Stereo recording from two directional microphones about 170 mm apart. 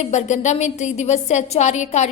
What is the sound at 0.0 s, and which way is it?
A woman's voice, 40° left (ahead or behind).